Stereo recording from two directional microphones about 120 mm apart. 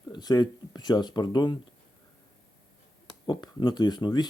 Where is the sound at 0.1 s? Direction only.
35° left (ahead or behind).